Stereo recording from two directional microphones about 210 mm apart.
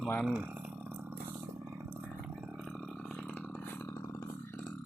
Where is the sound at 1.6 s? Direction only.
15° right (ahead or behind).